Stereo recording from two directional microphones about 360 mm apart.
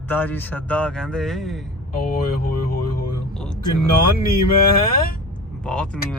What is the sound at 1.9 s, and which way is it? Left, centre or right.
Speech, left.